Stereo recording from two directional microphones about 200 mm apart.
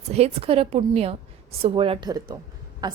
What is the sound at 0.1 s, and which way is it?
A woman's voice, 30° right (ahead or behind).